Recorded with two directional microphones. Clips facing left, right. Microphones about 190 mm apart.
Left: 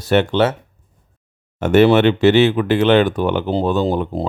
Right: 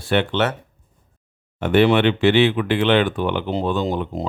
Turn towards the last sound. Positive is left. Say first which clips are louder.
# left 4 dB
turn(degrees=35)  # may be behind; listen again after turning